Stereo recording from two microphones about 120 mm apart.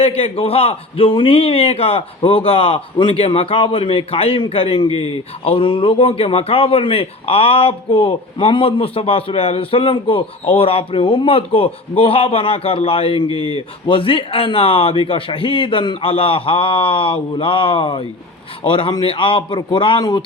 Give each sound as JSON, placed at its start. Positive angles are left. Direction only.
{"t": 0.0, "sound": "a man's voice", "side_deg": 55}